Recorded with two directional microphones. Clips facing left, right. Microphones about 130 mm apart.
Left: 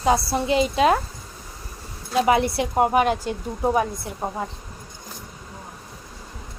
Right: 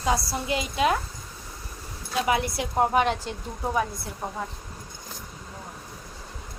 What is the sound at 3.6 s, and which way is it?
Speech, 25° left (ahead or behind).